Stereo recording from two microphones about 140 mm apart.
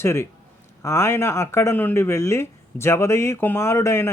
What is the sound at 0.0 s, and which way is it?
A man's voice, 20° left (ahead or behind).